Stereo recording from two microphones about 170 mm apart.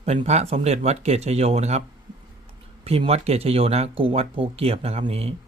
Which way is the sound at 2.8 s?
35° right (ahead or behind).